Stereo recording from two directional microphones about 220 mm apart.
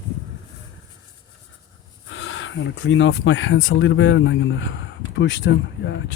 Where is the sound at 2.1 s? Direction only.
60° left (ahead or behind).